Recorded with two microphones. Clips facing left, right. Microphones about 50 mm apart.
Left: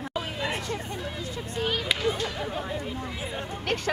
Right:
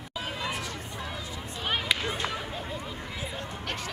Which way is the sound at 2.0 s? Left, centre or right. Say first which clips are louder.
Left 4 dB; centre.